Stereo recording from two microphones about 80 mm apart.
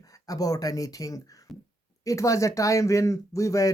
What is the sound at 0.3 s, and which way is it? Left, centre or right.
Speech, left.